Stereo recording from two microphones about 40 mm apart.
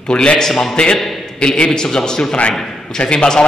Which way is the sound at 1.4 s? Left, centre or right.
Left.